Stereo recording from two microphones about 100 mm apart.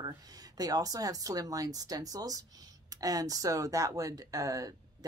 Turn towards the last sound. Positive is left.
turn(degrees=-35)  # may be behind; listen again after turning